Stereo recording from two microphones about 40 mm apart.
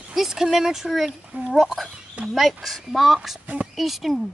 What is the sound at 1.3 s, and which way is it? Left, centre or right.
Speech, right.